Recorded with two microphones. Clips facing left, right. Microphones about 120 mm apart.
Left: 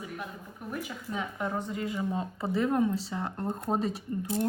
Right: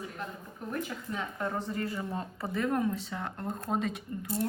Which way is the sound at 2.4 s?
30° left (ahead or behind).